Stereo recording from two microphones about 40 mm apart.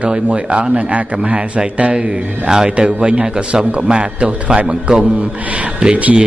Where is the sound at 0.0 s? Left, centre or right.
Right.